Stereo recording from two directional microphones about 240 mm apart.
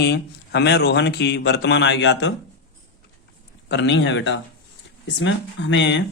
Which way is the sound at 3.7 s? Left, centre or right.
Left.